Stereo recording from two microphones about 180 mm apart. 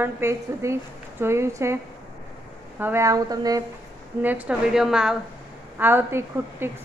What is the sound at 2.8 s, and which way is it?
Speech, 15° right (ahead or behind).